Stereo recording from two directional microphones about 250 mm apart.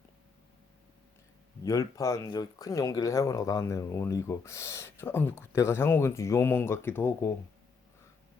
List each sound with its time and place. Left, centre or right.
1.6 s speech: centre